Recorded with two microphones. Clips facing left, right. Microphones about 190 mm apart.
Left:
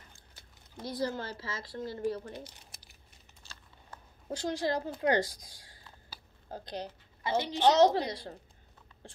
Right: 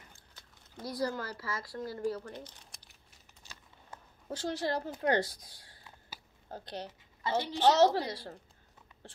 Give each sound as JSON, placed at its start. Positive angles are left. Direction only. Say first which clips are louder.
{"t": 0.8, "sound": "a woman's voice", "louder": "even", "side_deg": 25}
{"t": 2.3, "sound": "speech", "louder": "left 1 dB", "side_deg": 10}
{"t": 4.3, "sound": "a woman's voice", "louder": "left 2 dB", "side_deg": 15}